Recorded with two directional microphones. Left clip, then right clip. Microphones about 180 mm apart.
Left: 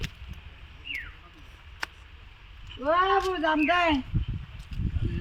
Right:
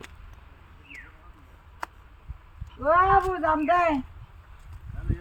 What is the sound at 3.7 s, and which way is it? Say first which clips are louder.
Speech: right 3 dB; 20° right (ahead or behind).